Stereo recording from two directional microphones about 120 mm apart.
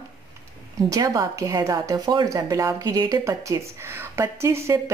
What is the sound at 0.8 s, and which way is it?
A woman's voice, 30° right (ahead or behind).